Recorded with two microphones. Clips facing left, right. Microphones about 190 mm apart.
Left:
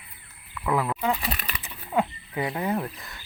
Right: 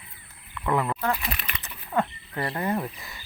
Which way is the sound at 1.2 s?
35° left (ahead or behind).